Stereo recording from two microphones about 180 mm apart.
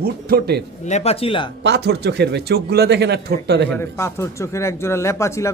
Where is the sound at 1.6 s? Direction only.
70° right (ahead or behind).